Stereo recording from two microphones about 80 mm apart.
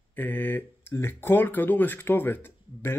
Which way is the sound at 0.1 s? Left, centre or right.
Left.